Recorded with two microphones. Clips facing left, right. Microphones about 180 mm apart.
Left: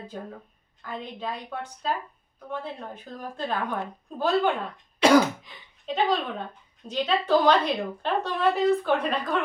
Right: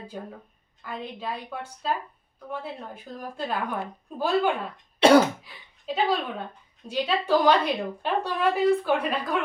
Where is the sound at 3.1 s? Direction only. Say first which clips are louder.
Even; 10° right (ahead or behind).